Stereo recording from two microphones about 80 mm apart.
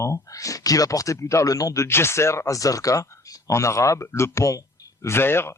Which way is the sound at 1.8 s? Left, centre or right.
Left.